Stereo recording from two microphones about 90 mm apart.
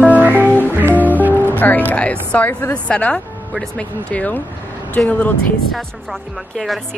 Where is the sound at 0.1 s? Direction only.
20° right (ahead or behind).